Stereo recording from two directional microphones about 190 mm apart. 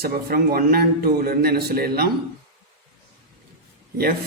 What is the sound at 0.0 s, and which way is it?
A man's voice, 50° right (ahead or behind).